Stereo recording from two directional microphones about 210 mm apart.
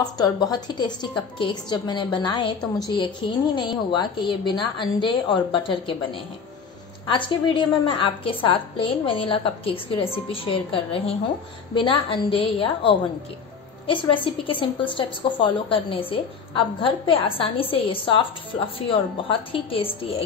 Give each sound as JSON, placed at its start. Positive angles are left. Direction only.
{"t": 0.0, "sound": "a woman's voice", "side_deg": 20}
{"t": 7.1, "sound": "a woman's voice", "side_deg": 25}